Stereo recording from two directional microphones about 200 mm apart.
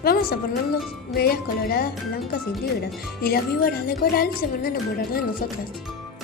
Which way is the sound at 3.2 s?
50° left (ahead or behind).